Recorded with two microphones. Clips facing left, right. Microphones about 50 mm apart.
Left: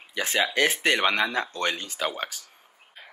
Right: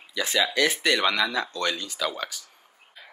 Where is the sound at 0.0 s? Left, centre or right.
Left.